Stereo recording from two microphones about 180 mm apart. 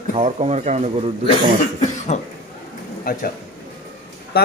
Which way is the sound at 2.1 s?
40° left (ahead or behind).